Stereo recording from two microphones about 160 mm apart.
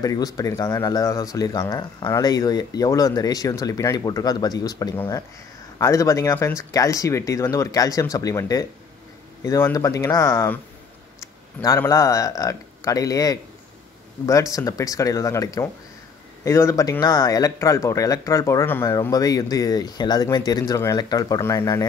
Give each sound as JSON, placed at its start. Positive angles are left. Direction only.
{"t": 0.0, "sound": "speech", "side_deg": 20}
{"t": 11.6, "sound": "speech", "side_deg": 20}